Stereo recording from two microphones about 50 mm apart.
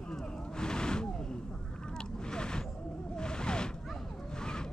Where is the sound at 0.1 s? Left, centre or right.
Centre.